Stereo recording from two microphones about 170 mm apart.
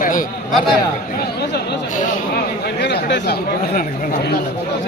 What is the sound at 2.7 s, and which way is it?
Chatter, 80° left.